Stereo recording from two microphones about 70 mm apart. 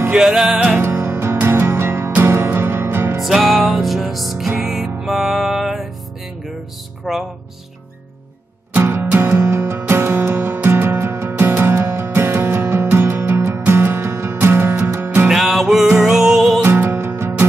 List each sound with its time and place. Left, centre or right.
0.1 s music: centre
0.7 s music: right
3.2 s music: centre
7.1 s music: centre
8.7 s music: right
15.2 s music: centre
16.6 s music: right